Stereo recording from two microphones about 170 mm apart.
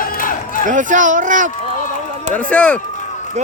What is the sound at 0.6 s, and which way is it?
Speech, 50° right (ahead or behind).